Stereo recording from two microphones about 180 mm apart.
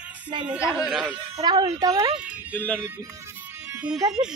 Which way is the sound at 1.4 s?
20° right (ahead or behind).